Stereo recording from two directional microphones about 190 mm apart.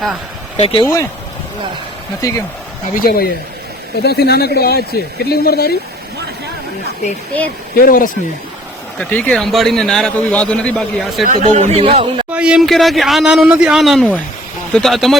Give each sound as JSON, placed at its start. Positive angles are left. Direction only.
{"t": 0.5, "sound": "speech", "side_deg": 30}
{"t": 2.2, "sound": "speech", "side_deg": 20}
{"t": 2.9, "sound": "a man's voice", "side_deg": 50}
{"t": 7.8, "sound": "speech", "side_deg": 50}
{"t": 9.0, "sound": "a man's voice", "side_deg": 10}
{"t": 11.3, "sound": "speech", "side_deg": -40}
{"t": 12.3, "sound": "a man's voice", "side_deg": -5}